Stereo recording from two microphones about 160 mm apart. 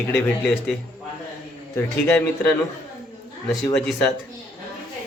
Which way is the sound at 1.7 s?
10° left (ahead or behind).